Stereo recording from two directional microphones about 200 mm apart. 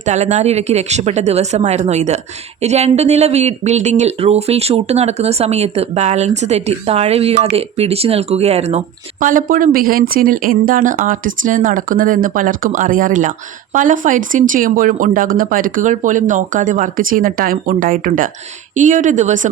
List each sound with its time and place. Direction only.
0.0 s speech: 35° right (ahead or behind)
9.2 s speech: 40° right (ahead or behind)